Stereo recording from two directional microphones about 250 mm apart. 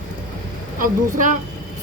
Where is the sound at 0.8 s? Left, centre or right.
Right.